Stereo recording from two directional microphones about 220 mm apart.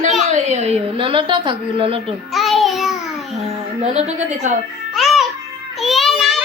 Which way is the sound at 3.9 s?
30° right (ahead or behind).